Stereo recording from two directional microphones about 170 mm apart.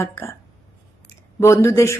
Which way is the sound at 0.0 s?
15° left (ahead or behind).